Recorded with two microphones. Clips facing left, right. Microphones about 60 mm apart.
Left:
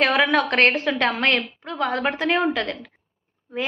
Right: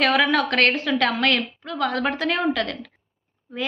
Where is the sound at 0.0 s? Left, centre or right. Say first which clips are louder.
Even; left.